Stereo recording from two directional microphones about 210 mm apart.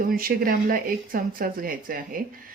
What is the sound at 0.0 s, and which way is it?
A woman's voice, 45° right (ahead or behind).